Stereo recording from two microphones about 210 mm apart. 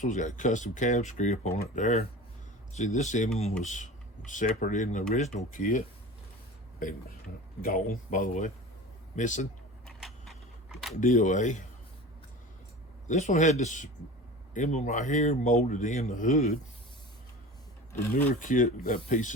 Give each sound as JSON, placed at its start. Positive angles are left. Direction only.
{"t": 0.0, "sound": "speech", "side_deg": 35}
{"t": 7.6, "sound": "speech", "side_deg": 45}
{"t": 9.8, "sound": "a sound", "side_deg": 0}
{"t": 10.9, "sound": "speech", "side_deg": 35}
{"t": 13.1, "sound": "speech", "side_deg": 35}
{"t": 18.3, "sound": "speech", "side_deg": 35}